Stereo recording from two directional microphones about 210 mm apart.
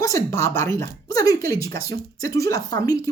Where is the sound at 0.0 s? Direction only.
15° left (ahead or behind).